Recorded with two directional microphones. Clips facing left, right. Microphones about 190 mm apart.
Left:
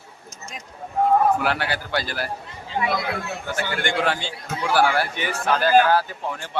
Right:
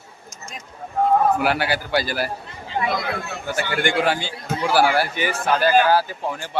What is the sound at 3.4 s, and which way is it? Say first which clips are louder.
A man's voice: right 4 dB; 10° right (ahead or behind).